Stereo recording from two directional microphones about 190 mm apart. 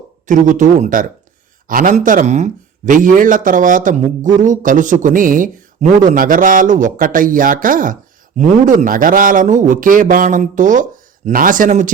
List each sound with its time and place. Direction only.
0.3 s a man's voice: 40° right (ahead or behind)